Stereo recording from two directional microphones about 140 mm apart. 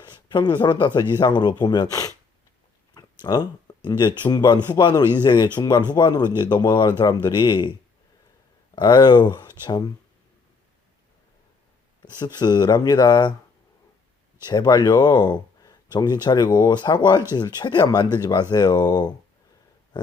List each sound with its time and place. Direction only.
0.0 s speech: 30° left (ahead or behind)
2.9 s a sound: 30° left (ahead or behind)
3.8 s speech: 30° left (ahead or behind)
8.7 s speech: 30° left (ahead or behind)
12.0 s speech: 30° left (ahead or behind)
14.4 s speech: 30° left (ahead or behind)